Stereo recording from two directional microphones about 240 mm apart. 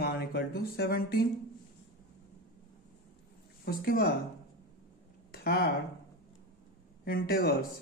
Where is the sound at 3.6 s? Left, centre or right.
Left.